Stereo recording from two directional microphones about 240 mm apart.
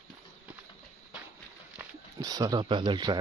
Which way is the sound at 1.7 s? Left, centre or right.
Centre.